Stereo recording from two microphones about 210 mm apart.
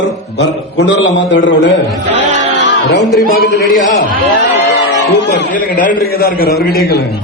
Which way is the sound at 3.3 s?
40° left (ahead or behind).